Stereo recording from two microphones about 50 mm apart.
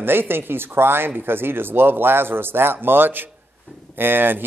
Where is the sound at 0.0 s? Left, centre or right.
Right.